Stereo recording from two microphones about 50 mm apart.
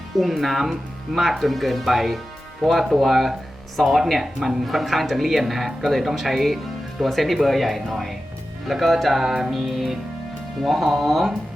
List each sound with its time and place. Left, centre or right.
0.2 s speech: centre